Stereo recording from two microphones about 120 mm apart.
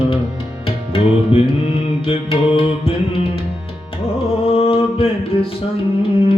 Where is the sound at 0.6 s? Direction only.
50° left (ahead or behind).